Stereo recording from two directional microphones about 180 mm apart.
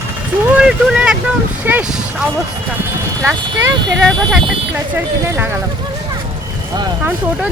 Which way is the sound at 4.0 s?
Centre (ahead or behind).